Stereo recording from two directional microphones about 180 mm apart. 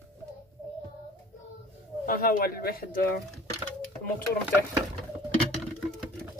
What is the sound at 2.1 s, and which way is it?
Speech, 50° left (ahead or behind).